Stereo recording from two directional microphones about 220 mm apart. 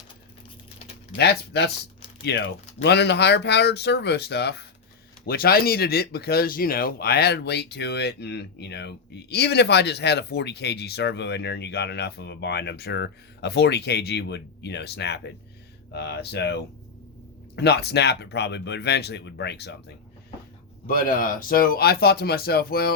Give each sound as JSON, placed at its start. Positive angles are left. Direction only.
{"t": 1.1, "sound": "speech", "side_deg": 50}
{"t": 17.6, "sound": "speech", "side_deg": 50}
{"t": 20.8, "sound": "speech", "side_deg": 40}